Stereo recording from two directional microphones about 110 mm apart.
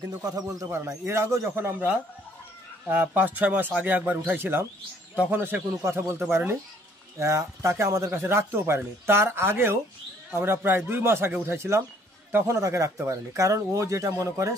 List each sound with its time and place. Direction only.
0.2 s speech: 30° right (ahead or behind)